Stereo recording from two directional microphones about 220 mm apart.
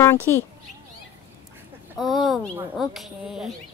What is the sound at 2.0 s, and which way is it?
Speech, centre (ahead or behind).